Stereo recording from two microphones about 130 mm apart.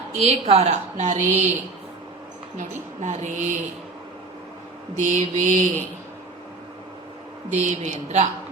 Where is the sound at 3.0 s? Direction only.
65° right (ahead or behind).